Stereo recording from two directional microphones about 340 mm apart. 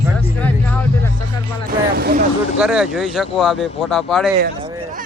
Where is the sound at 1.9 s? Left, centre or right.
Right.